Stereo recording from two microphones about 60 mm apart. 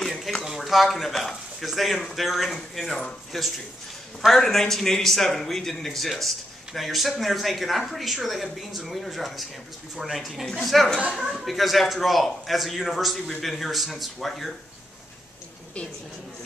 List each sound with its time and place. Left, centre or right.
0.0 s a man's voice: centre